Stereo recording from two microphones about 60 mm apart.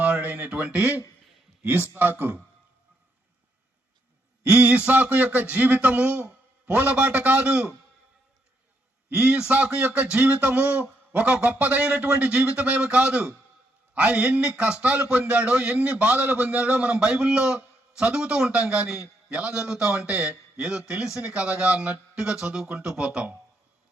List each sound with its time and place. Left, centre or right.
0.0 s speech: right
4.4 s a man's voice: right
9.0 s a man's voice: right
19.9 s a man's voice: right